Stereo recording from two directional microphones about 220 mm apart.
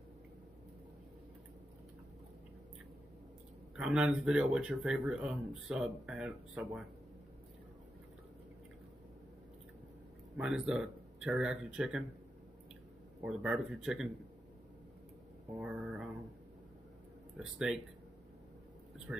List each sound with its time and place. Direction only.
3.7 s speech: 5° right (ahead or behind)
10.3 s speech: 5° right (ahead or behind)
13.2 s speech: 5° right (ahead or behind)
15.5 s speech: 5° right (ahead or behind)
17.4 s speech: 5° right (ahead or behind)